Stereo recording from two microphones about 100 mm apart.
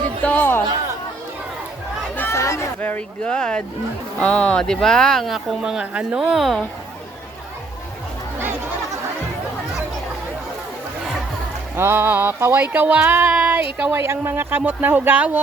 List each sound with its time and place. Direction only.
0.2 s speech: 15° left (ahead or behind)
2.1 s chatter: 25° left (ahead or behind)
3.2 s speech: 10° left (ahead or behind)
5.6 s speech: 10° right (ahead or behind)
11.8 s a sound: 20° right (ahead or behind)